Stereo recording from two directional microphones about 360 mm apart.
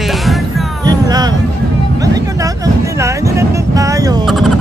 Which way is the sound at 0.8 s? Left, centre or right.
Centre.